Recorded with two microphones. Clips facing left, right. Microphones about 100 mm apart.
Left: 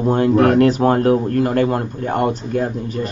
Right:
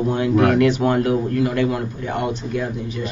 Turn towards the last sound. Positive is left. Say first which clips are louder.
# left 4 dB
turn(degrees=40)  # may be behind; listen again after turning